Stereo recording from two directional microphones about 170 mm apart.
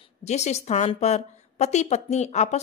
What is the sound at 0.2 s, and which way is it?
A woman's voice, 40° left (ahead or behind).